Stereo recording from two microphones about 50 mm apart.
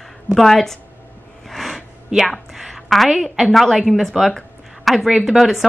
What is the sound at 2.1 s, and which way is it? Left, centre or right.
Speech, centre.